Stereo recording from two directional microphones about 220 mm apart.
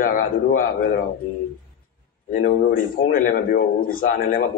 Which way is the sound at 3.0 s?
40° left (ahead or behind).